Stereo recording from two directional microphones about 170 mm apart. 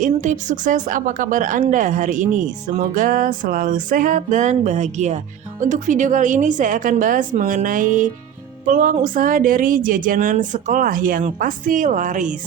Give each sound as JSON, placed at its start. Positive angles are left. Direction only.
{"t": 0.0, "sound": "a woman's voice", "side_deg": -45}